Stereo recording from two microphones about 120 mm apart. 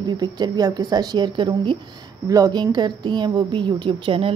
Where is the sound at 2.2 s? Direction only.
30° right (ahead or behind).